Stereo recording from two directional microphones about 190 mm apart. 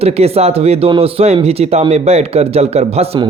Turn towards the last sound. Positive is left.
turn(degrees=-30)  # may be behind; listen again after turning